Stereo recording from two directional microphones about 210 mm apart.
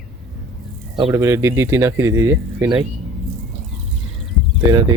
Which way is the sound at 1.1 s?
15° right (ahead or behind).